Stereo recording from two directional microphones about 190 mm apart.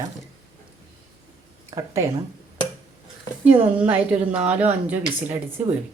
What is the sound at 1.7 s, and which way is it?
Speech, 15° right (ahead or behind).